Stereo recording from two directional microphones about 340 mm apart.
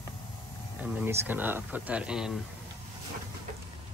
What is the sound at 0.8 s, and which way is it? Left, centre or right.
Speech, centre.